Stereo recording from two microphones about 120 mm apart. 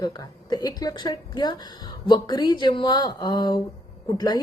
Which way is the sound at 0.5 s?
35° left (ahead or behind).